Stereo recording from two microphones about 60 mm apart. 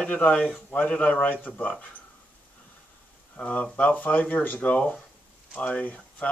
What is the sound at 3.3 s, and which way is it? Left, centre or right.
Speech, left.